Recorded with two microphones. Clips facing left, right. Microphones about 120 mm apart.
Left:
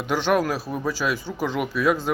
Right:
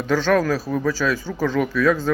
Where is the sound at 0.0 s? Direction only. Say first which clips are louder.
Right 3 dB; 15° left (ahead or behind).